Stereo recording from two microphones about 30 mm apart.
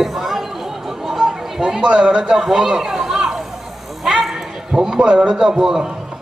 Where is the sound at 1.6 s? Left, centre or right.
Right.